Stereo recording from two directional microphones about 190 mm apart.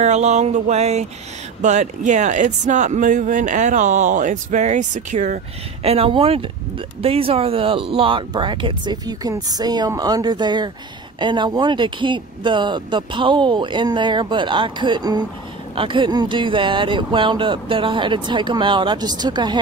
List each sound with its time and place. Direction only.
0.0 s speech: 35° right (ahead or behind)